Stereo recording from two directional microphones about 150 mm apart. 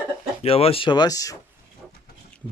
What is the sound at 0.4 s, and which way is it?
Speech, 40° left (ahead or behind).